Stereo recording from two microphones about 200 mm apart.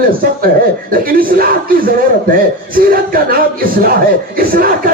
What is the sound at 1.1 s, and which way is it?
A man's voice, 45° right (ahead or behind).